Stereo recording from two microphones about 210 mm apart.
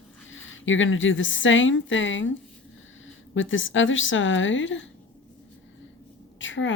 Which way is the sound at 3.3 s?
65° left (ahead or behind).